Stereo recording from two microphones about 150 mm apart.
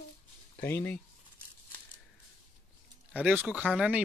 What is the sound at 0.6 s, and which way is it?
Speech, 10° left (ahead or behind).